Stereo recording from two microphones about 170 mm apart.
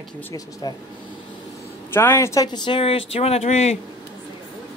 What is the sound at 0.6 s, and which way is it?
Speech, 25° left (ahead or behind).